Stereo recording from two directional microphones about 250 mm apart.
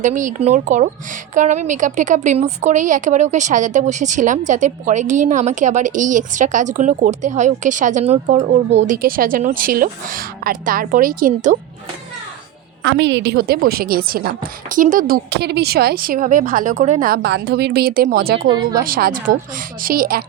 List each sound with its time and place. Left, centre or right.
0.0 s a woman's voice: right
12.8 s a woman's voice: right
18.4 s speech: centre
18.9 s a woman's voice: right